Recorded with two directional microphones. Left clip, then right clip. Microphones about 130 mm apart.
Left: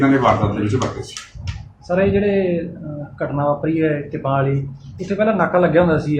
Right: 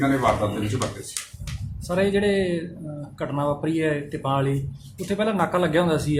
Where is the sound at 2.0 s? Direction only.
90° right.